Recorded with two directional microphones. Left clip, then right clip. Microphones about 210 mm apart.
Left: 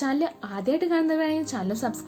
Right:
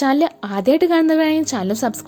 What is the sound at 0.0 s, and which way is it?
A woman's voice, 40° right (ahead or behind).